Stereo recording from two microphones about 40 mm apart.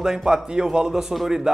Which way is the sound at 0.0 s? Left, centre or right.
Centre.